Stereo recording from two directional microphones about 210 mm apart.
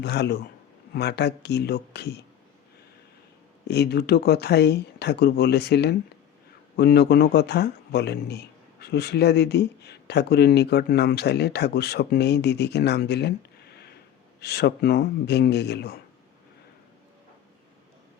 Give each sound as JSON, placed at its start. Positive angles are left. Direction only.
{"t": 0.0, "sound": "speech", "side_deg": 55}
{"t": 3.7, "sound": "speech", "side_deg": 50}